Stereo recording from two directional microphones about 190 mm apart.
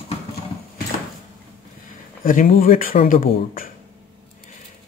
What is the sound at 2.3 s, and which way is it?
Speech, 50° left (ahead or behind).